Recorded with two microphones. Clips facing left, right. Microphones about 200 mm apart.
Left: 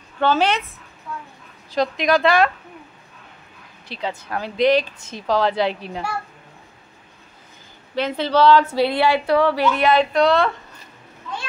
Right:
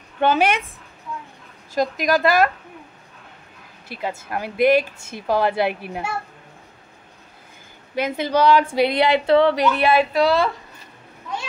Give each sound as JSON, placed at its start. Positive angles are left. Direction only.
{"t": 0.2, "sound": "speech", "side_deg": -15}
{"t": 1.7, "sound": "a woman's voice", "side_deg": -45}
{"t": 2.0, "sound": "speech", "side_deg": -5}
{"t": 4.0, "sound": "speech", "side_deg": -10}
{"t": 7.9, "sound": "a woman's voice", "side_deg": -10}
{"t": 9.7, "sound": "speech", "side_deg": -10}